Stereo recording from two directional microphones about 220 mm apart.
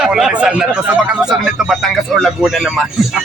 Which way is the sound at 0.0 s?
Centre (ahead or behind).